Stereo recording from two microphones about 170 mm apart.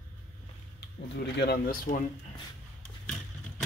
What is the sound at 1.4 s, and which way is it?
Speech, 65° left (ahead or behind).